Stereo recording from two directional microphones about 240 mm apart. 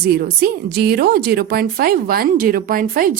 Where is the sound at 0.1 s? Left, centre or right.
Right.